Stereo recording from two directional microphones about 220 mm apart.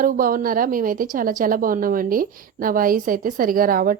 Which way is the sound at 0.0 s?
40° right (ahead or behind).